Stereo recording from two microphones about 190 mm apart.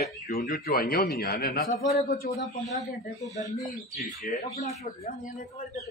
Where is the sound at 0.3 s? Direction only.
55° left (ahead or behind).